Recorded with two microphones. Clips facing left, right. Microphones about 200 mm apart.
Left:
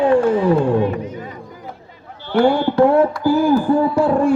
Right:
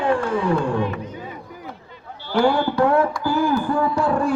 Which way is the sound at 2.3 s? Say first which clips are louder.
Left 4 dB; 25° left (ahead or behind).